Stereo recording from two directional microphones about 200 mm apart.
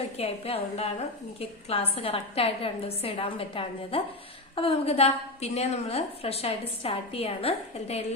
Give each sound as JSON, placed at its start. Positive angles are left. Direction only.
{"t": 0.2, "sound": "a woman's voice", "side_deg": 30}